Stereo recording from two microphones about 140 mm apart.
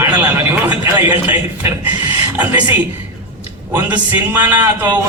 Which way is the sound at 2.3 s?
10° right (ahead or behind).